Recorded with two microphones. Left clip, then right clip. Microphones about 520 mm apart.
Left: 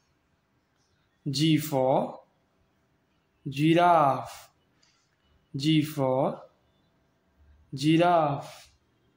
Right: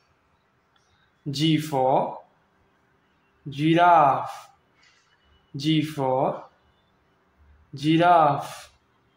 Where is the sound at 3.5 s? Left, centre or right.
Left.